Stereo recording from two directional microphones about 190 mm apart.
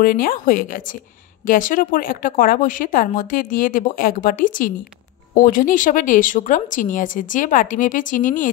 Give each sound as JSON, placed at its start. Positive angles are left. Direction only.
{"t": 0.0, "sound": "a woman's voice", "side_deg": 50}